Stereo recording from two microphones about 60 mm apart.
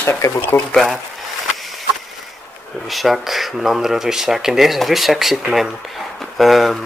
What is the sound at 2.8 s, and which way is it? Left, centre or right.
Speech, centre.